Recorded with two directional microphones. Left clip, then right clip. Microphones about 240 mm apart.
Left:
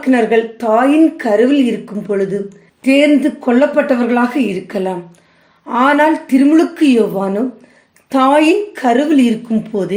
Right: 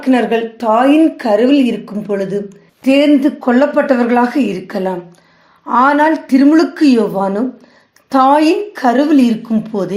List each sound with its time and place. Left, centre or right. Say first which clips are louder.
0.0 s a woman's voice: left 1 dB; centre